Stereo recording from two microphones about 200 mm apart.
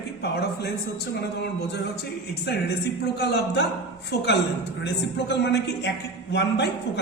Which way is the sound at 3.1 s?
55° left (ahead or behind).